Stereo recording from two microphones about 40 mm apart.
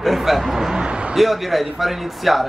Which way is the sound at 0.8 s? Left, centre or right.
Right.